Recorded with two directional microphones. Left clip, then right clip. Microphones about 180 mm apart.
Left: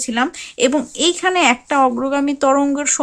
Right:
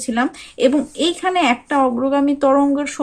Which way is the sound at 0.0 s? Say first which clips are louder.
Left 1 dB; 25° left (ahead or behind).